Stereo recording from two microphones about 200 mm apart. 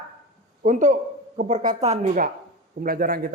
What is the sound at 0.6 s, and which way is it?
A man's voice, 40° right (ahead or behind).